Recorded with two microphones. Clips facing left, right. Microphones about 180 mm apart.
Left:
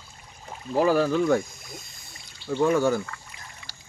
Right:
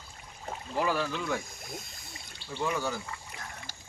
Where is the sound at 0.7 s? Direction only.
40° left (ahead or behind).